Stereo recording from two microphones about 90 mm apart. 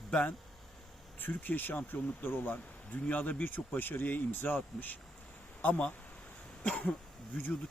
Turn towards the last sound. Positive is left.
turn(degrees=15)  # may be behind; listen again after turning